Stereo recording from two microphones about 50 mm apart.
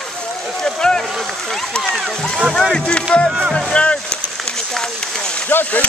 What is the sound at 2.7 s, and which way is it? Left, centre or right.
Speech, centre.